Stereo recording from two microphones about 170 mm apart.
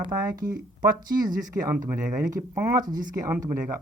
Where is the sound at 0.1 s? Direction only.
20° right (ahead or behind).